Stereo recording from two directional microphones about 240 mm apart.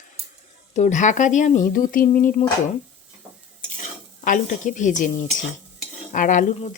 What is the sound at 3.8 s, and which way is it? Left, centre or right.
Speech, left.